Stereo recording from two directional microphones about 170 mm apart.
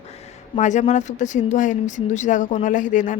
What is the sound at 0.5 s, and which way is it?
Speech, 45° left (ahead or behind).